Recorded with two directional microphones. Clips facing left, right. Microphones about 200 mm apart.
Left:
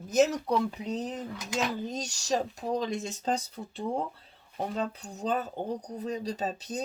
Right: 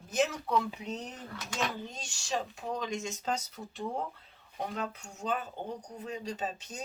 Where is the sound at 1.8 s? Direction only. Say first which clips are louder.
Left 8 dB; 40° left (ahead or behind).